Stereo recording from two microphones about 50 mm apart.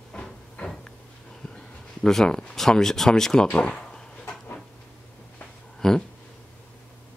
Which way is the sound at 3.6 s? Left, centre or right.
Centre.